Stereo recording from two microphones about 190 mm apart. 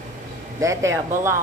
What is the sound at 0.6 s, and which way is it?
Speech, 15° right (ahead or behind).